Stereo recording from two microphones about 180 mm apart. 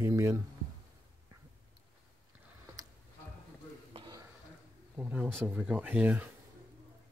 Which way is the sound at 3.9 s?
25° right (ahead or behind).